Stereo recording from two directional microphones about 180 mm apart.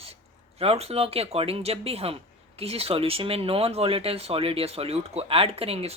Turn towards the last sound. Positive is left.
turn(degrees=-35)  # may be behind; listen again after turning